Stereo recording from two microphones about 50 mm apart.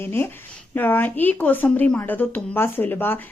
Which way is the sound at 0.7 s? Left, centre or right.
Left.